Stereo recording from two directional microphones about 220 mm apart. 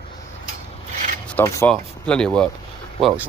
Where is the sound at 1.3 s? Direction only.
10° left (ahead or behind).